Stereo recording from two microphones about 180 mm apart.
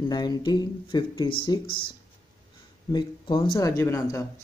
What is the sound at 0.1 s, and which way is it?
Speech, 20° left (ahead or behind).